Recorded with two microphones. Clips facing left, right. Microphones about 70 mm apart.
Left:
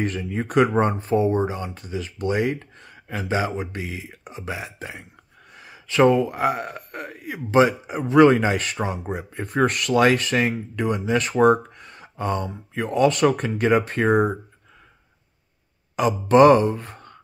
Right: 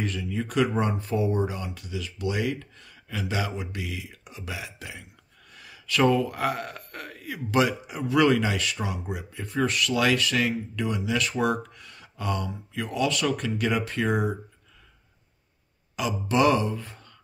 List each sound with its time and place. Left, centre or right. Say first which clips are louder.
0.0 s speech: left 4 dB; left
16.0 s speech: left 9 dB; left